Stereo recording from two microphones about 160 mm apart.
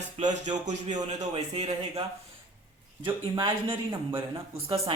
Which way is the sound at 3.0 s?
30° right (ahead or behind).